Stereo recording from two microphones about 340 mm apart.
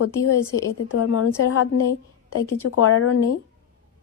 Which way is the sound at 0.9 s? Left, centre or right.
Left.